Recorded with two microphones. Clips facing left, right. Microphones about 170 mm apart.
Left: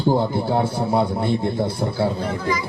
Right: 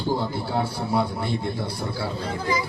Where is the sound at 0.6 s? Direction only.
25° left (ahead or behind).